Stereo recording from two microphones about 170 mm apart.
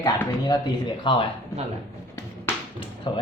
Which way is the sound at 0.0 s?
20° left (ahead or behind).